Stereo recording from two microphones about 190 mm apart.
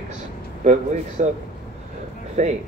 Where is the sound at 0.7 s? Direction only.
40° right (ahead or behind).